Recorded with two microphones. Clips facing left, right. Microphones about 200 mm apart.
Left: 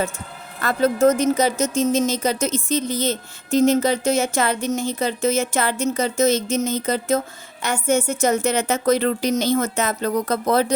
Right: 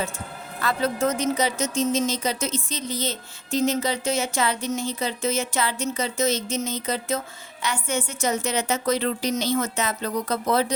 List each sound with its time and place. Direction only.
0.6 s speech: 45° left (ahead or behind)